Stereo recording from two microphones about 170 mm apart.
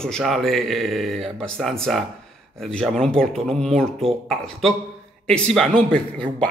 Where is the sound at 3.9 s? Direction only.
35° right (ahead or behind).